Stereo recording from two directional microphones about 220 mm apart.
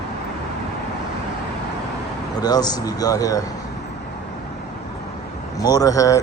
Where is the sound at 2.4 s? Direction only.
20° left (ahead or behind).